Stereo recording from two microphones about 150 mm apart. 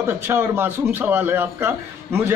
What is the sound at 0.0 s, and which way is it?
A man's voice, 15° right (ahead or behind).